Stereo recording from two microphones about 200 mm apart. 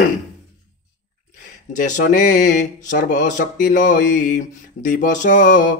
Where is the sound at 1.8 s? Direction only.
40° left (ahead or behind).